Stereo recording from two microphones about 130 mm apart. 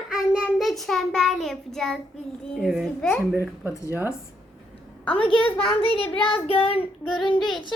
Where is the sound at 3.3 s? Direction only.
20° right (ahead or behind).